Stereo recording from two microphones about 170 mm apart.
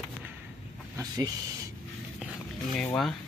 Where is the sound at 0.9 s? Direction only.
20° right (ahead or behind).